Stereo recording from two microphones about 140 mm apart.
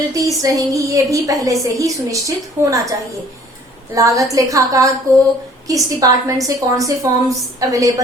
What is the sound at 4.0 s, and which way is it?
A woman's voice, 25° right (ahead or behind).